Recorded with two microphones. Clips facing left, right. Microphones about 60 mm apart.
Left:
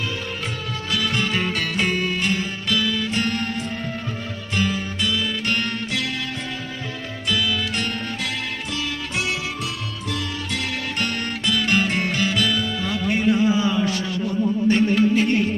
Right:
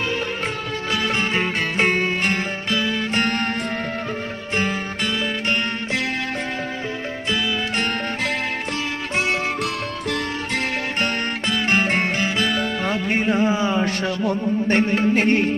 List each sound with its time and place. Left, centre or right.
0.9 s music: right
3.2 s music: right
4.5 s music: right
7.3 s music: right
11.0 s music: right